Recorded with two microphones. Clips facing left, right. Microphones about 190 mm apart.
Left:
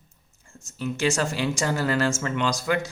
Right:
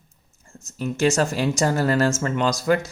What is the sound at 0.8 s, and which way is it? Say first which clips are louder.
Speech: right 4 dB; 40° right (ahead or behind).